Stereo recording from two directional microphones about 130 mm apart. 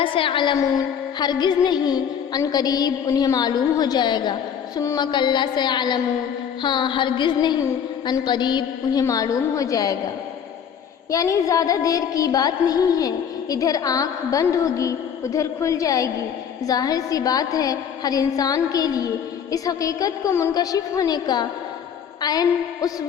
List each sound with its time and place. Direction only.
0.0 s a woman's voice: 40° left (ahead or behind)
4.8 s a woman's voice: 25° left (ahead or behind)
5.1 s a woman's voice: 35° left (ahead or behind)
11.1 s a woman's voice: 25° left (ahead or behind)